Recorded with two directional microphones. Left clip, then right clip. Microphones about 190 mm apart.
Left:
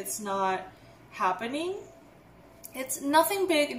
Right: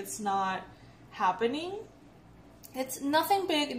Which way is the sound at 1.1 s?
40° right (ahead or behind).